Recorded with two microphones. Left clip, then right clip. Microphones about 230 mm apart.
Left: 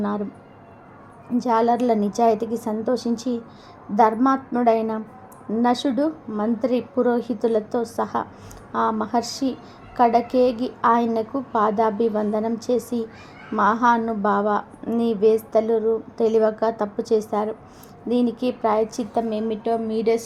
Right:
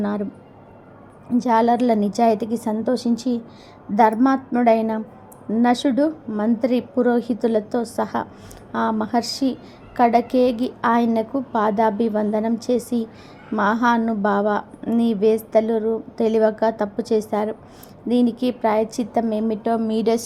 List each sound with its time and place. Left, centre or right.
1.4 s a woman's voice: centre